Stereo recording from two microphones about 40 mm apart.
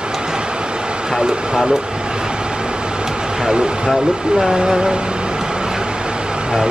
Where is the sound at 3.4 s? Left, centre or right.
Right.